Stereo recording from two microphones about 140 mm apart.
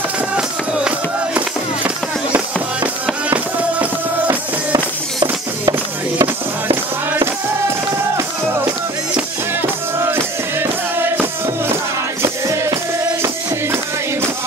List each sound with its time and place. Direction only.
0.4 s music: 10° right (ahead or behind)
5.2 s music: 25° right (ahead or behind)
9.1 s music: 15° right (ahead or behind)